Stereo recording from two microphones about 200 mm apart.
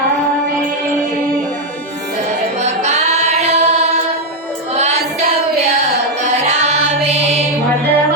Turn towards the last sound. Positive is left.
turn(degrees=-35)  # may be behind; listen again after turning